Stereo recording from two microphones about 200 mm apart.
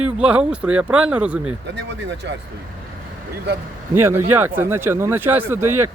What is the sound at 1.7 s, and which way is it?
Speech, 60° right (ahead or behind).